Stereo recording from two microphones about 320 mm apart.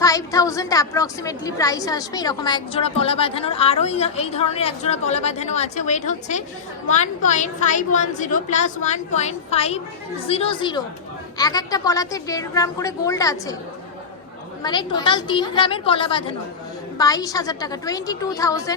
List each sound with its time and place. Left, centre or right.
0.0 s a woman's voice: centre
14.6 s a woman's voice: centre